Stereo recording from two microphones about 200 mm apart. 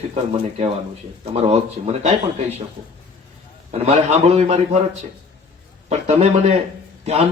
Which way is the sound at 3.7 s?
30° right (ahead or behind).